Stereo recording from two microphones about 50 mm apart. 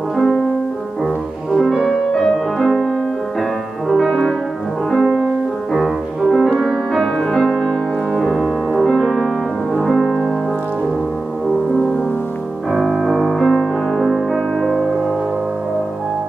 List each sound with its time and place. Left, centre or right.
0.1 s music: centre
1.5 s music: centre
1.9 s music: centre
3.9 s music: centre
12.7 s music: centre